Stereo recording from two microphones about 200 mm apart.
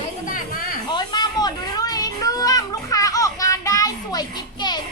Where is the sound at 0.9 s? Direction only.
20° left (ahead or behind).